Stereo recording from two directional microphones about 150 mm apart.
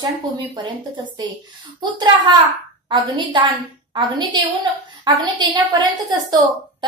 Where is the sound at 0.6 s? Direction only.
30° right (ahead or behind).